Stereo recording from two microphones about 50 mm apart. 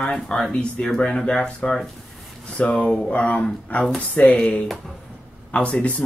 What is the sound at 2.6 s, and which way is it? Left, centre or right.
Speech, left.